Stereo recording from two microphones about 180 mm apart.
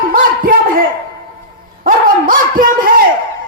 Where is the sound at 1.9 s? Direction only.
50° right (ahead or behind).